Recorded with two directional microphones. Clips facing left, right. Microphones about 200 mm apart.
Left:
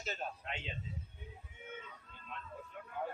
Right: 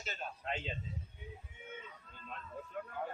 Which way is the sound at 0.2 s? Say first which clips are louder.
Left 1 dB; 35° left (ahead or behind).